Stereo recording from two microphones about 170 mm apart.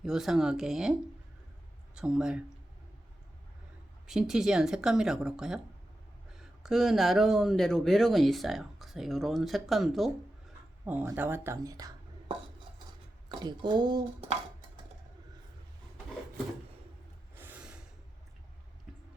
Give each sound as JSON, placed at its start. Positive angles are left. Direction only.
{"t": 0.0, "sound": "speech", "side_deg": 0}
{"t": 2.0, "sound": "speech", "side_deg": -5}
{"t": 4.0, "sound": "speech", "side_deg": -5}
{"t": 10.8, "sound": "speech", "side_deg": -10}
{"t": 13.2, "sound": "speech", "side_deg": -25}
{"t": 17.3, "sound": "snort", "side_deg": -10}
{"t": 18.9, "sound": "a sound", "side_deg": -5}